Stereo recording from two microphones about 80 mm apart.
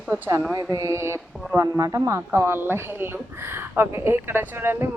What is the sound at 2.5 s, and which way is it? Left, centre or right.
Speech, right.